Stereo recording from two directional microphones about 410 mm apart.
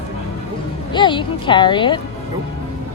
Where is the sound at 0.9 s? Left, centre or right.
Centre.